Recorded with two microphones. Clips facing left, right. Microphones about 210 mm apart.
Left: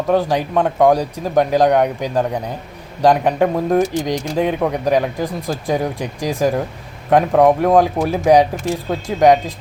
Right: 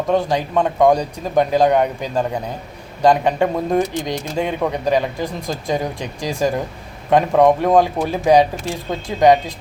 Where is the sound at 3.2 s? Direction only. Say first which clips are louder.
Left 2 dB; centre (ahead or behind).